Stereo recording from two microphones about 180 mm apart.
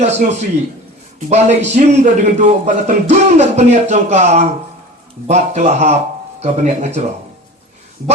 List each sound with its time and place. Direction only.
0.0 s speech: 40° right (ahead or behind)